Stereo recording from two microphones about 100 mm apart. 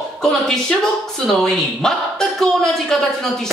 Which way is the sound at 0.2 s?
5° left (ahead or behind).